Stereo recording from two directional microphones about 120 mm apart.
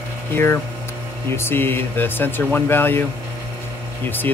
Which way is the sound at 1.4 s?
20° left (ahead or behind).